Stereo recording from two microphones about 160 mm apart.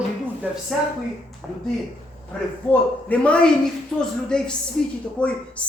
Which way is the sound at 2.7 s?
10° left (ahead or behind).